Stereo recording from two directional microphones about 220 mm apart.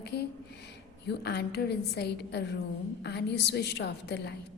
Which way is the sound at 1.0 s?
50° left (ahead or behind).